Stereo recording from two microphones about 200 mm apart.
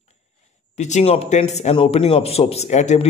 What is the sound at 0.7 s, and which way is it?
Speech, 35° left (ahead or behind).